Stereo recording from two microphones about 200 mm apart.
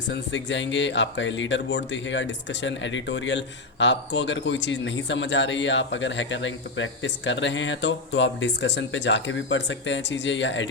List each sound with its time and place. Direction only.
0.1 s speech: 65° left (ahead or behind)